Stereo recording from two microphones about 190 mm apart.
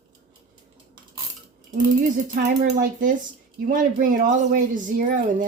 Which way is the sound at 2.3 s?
45° right (ahead or behind).